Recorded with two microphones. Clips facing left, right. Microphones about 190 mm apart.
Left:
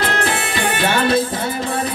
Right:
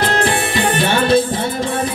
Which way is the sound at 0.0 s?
30° right (ahead or behind).